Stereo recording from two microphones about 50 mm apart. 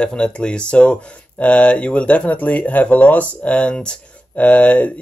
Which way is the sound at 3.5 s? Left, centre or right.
Centre.